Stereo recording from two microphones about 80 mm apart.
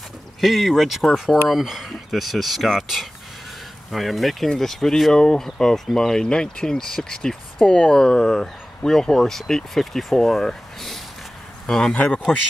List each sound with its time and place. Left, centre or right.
0.4 s speech: centre